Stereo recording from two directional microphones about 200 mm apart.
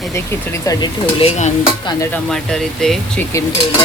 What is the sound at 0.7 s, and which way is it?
Stir, 20° left (ahead or behind).